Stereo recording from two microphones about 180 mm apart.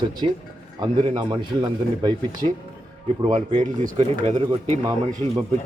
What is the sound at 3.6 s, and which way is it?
Speech, 45° right (ahead or behind).